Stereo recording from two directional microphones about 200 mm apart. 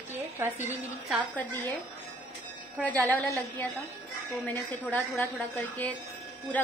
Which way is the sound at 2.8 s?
10° left (ahead or behind).